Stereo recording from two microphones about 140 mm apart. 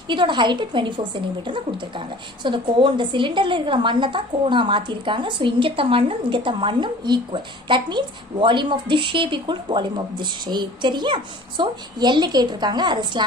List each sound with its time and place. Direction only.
0.1 s a woman's voice: 35° right (ahead or behind)